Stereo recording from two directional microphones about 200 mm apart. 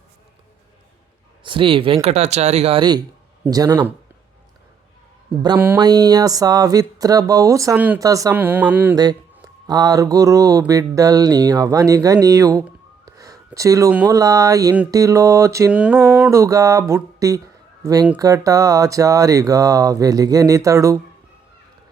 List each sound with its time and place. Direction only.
1.5 s speech: 25° right (ahead or behind)
5.5 s speech: 10° right (ahead or behind)